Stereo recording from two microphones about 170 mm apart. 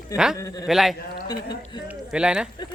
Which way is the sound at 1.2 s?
25° left (ahead or behind).